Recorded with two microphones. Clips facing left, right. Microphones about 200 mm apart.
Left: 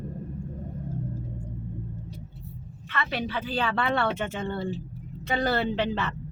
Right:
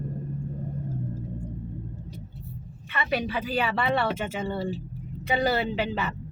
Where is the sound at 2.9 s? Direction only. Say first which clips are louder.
Right 2 dB; 10° right (ahead or behind).